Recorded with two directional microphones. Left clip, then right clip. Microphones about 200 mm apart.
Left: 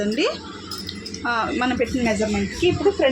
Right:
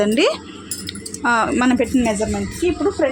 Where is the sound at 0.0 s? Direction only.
55° right (ahead or behind).